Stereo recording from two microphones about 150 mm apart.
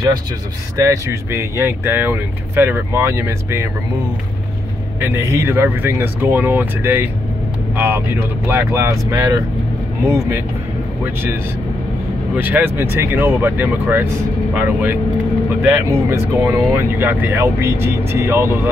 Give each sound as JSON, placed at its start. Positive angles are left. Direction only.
{"t": 0.7, "sound": "speech", "side_deg": -20}
{"t": 5.0, "sound": "speech", "side_deg": -20}
{"t": 12.4, "sound": "speech", "side_deg": -10}